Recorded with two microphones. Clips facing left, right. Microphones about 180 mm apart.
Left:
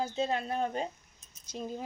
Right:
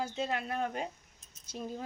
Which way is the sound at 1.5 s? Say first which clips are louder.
Left 2 dB; 15° left (ahead or behind).